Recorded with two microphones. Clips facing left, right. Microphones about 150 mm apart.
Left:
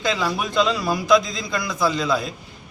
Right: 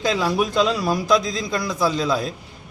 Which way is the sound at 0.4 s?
40° right (ahead or behind).